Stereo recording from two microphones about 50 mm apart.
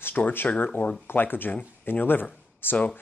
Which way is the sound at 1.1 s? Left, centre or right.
Left.